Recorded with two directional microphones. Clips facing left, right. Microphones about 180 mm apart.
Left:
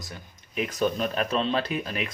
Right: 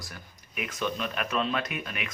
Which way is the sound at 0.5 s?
35° left (ahead or behind).